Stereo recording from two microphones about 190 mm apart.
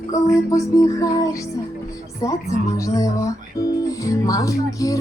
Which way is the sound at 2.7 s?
15° left (ahead or behind).